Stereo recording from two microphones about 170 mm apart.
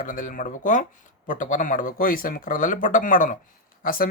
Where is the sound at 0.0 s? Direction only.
50° left (ahead or behind).